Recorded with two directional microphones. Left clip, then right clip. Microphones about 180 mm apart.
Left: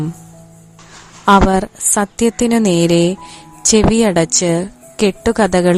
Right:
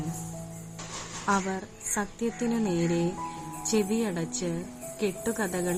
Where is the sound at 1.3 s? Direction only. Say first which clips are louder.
Left 18 dB; 60° left (ahead or behind).